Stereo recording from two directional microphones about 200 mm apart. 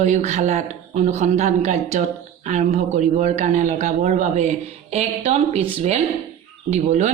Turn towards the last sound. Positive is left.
turn(degrees=-35)  # may be behind; listen again after turning